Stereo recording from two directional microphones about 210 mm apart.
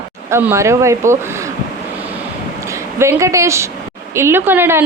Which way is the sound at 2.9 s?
10° right (ahead or behind).